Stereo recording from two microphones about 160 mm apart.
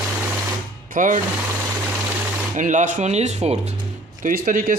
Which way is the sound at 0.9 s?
55° right (ahead or behind).